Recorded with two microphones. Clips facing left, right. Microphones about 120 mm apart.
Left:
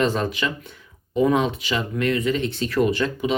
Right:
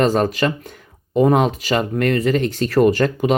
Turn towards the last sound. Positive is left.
turn(degrees=-50)  # may be behind; listen again after turning